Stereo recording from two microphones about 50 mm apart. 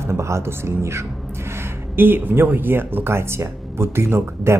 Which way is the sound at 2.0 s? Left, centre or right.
Right.